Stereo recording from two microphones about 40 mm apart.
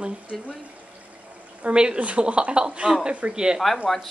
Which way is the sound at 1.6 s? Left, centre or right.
Right.